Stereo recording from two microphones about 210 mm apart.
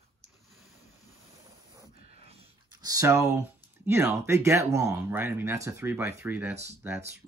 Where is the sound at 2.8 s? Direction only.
15° right (ahead or behind).